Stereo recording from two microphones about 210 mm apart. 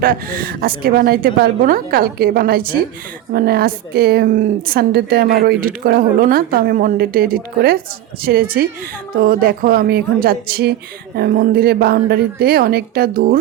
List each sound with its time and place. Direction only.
0.0 s a woman's voice: 45° right (ahead or behind)